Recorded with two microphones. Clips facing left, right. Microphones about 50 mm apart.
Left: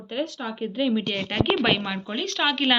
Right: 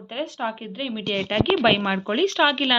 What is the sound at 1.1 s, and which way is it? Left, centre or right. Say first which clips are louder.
Speech: right 4 dB; centre.